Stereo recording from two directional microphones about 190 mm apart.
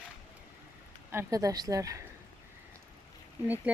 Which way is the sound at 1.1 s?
20° right (ahead or behind).